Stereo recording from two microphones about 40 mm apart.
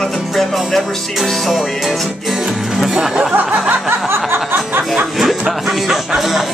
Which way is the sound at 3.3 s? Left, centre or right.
Right.